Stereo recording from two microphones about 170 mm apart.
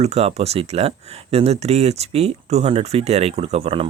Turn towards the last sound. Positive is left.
turn(degrees=-35)  # may be behind; listen again after turning